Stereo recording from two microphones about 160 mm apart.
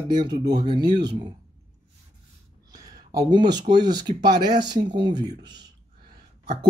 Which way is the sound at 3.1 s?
25° right (ahead or behind).